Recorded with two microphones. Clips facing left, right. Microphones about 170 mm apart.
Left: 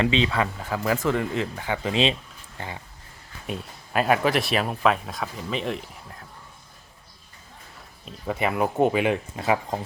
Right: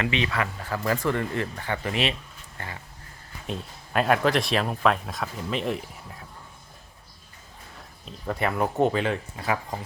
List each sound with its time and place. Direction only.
0.0 s speech: 25° left (ahead or behind)
0.6 s speech: 10° left (ahead or behind)
1.9 s speech: 20° left (ahead or behind)
3.4 s speech: 5° left (ahead or behind)
8.0 s speech: 5° left (ahead or behind); by 9.8 s 20° left (ahead or behind)